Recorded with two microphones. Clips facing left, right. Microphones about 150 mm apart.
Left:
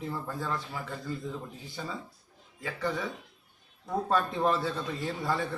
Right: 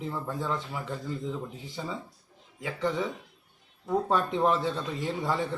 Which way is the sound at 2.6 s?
20° right (ahead or behind).